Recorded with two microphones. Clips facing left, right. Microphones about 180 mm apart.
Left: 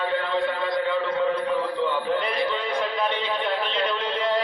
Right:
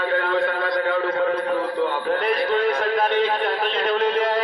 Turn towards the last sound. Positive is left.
turn(degrees=-45)  # may be behind; listen again after turning